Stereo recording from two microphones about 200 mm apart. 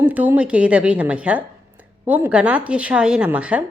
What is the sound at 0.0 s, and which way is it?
A woman's voice, 10° right (ahead or behind).